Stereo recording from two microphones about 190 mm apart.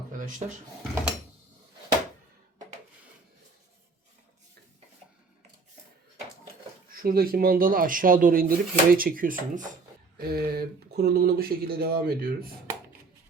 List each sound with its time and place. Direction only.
0.1 s drawer open or close: 45° right (ahead or behind)
6.9 s speech: 50° right (ahead or behind)